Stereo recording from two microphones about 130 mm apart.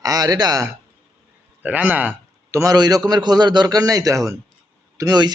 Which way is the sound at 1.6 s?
10° right (ahead or behind).